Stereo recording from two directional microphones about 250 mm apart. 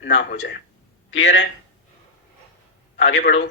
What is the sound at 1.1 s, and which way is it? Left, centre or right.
Speech, left.